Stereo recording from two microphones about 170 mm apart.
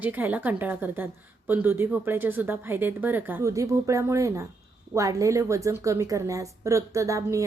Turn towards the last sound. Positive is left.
turn(degrees=-20)  # may be behind; listen again after turning